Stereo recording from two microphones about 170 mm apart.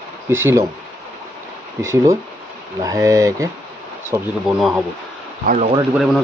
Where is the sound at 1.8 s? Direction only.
15° right (ahead or behind).